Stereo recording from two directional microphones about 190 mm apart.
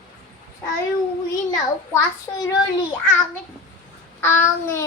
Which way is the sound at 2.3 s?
20° left (ahead or behind).